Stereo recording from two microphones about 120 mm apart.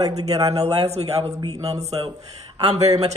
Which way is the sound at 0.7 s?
60° right (ahead or behind).